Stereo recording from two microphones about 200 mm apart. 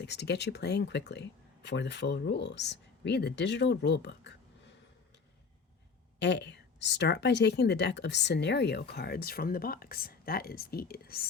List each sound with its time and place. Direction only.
0.0 s a woman's voice: 55° left (ahead or behind)
6.1 s a woman's voice: 60° left (ahead or behind)